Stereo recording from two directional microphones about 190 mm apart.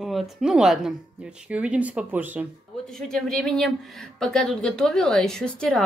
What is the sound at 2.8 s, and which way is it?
Speech, 5° left (ahead or behind).